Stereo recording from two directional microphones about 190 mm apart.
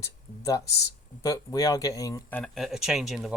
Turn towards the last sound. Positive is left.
turn(degrees=0)  # may be behind; listen again after turning